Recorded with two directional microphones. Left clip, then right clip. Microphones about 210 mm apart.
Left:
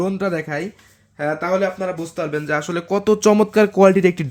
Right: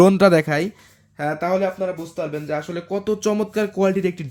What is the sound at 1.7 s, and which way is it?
Speech, 10° left (ahead or behind).